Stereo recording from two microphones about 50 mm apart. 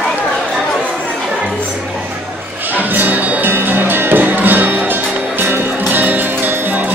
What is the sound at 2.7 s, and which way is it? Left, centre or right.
Music, right.